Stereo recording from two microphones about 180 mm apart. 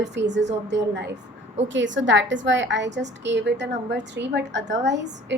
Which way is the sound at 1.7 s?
90° right.